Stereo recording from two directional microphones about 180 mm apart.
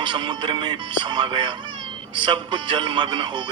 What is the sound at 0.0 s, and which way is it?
Speech, 25° right (ahead or behind).